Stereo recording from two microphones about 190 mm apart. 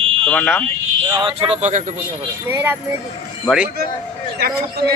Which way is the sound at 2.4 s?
10° right (ahead or behind).